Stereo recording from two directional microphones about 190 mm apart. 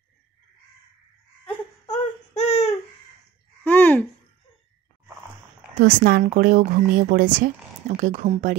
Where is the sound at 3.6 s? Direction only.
10° left (ahead or behind).